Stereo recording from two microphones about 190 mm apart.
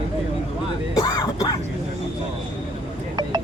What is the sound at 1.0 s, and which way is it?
Speech, 20° left (ahead or behind).